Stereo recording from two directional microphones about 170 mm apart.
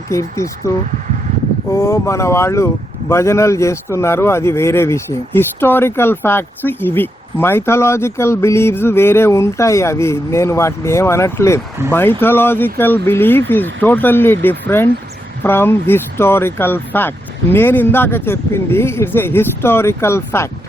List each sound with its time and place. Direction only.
0.1 s speech: 20° left (ahead or behind)
1.7 s speech: 15° left (ahead or behind)